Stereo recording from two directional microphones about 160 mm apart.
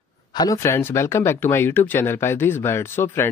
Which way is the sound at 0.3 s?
25° left (ahead or behind).